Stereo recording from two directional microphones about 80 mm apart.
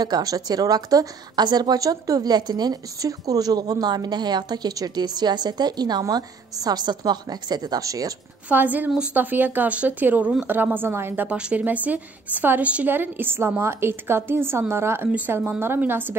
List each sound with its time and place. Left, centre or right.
0.0 s a woman's voice: right
8.5 s a woman's voice: right
11.2 s a woman's voice: centre; by 15.0 s right
15.0 s a woman's voice: centre